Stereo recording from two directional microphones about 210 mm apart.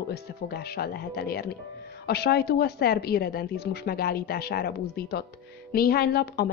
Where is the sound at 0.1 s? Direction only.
50° left (ahead or behind).